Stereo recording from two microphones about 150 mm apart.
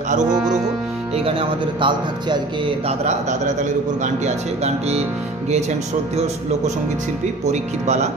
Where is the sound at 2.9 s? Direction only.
50° right (ahead or behind).